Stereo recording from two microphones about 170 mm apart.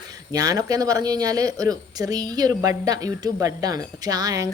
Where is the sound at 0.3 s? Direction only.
20° right (ahead or behind).